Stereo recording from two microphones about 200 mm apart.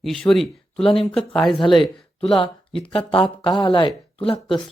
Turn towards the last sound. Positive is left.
turn(degrees=25)  # may be behind; listen again after turning